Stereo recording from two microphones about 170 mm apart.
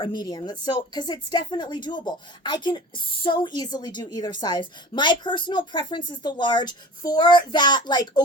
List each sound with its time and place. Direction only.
0.0 s a woman's voice: 25° left (ahead or behind)